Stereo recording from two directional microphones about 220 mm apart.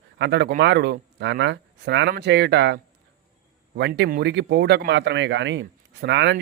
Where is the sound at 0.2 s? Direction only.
50° right (ahead or behind).